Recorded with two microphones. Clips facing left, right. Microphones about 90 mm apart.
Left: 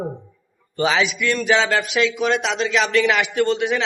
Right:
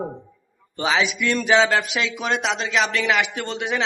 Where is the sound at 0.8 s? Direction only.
15° right (ahead or behind).